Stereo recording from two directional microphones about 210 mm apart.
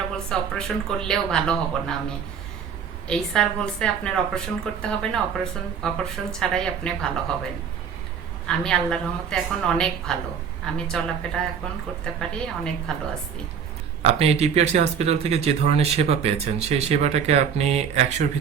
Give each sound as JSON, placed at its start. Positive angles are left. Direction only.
{"t": 0.3, "sound": "a woman's voice", "side_deg": 5}
{"t": 3.1, "sound": "a woman's voice", "side_deg": 5}
{"t": 8.4, "sound": "a woman's voice", "side_deg": 5}
{"t": 14.0, "sound": "speech", "side_deg": -30}